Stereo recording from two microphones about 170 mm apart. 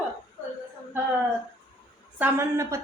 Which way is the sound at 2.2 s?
15° right (ahead or behind).